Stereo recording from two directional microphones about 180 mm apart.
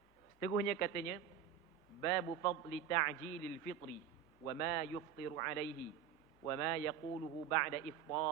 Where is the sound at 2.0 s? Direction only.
15° left (ahead or behind).